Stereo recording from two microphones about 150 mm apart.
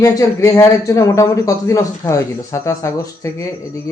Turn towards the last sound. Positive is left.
turn(degrees=20)  # may be behind; listen again after turning